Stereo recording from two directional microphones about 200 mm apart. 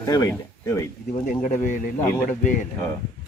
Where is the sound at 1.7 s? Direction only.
40° left (ahead or behind).